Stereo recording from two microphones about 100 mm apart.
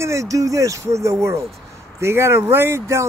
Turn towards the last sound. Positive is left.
turn(degrees=-25)  # may be behind; listen again after turning